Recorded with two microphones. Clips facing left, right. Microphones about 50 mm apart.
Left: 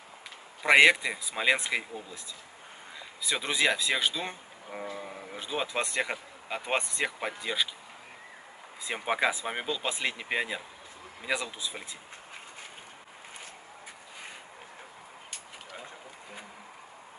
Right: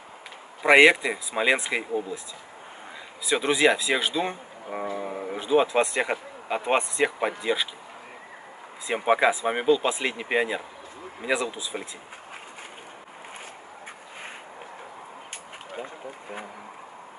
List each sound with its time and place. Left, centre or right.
0.6 s speech: centre
3.3 s speech: centre
7.1 s speech: centre
8.8 s speech: centre
15.7 s a sound: right